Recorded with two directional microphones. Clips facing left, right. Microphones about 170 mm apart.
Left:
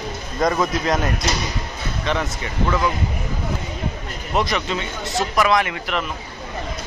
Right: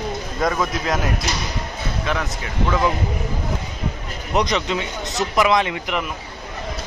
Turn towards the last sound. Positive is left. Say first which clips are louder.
# right 1 dB
turn(degrees=-15)  # may be behind; listen again after turning